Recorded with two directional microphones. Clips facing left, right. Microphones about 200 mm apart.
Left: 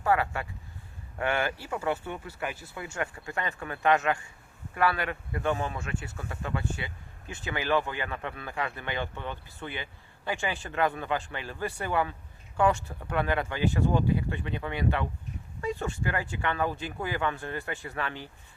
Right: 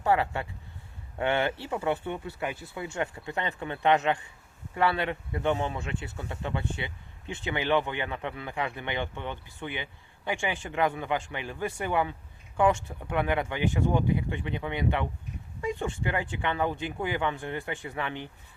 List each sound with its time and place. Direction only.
0.0 s speech: 25° right (ahead or behind)